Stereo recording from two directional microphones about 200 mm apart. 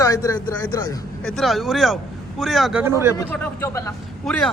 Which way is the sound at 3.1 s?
10° left (ahead or behind).